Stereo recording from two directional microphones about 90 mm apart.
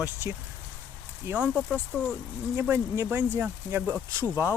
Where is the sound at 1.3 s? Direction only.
15° right (ahead or behind).